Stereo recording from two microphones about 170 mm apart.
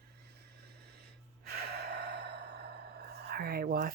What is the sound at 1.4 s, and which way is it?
Gasp, 70° right (ahead or behind).